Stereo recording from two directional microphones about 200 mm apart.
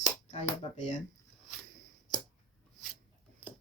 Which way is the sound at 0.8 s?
35° left (ahead or behind).